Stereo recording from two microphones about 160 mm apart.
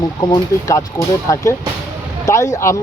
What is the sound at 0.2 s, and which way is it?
Speech, 25° left (ahead or behind).